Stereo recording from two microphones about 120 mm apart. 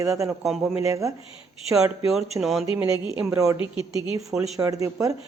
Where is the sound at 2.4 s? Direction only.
Centre (ahead or behind).